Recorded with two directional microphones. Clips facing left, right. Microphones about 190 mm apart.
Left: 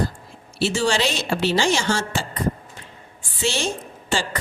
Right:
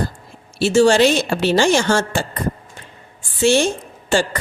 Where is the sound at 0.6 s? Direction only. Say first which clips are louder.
Right 9 dB; 50° right (ahead or behind).